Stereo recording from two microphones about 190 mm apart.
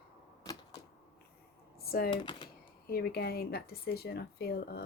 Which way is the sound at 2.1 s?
25° left (ahead or behind).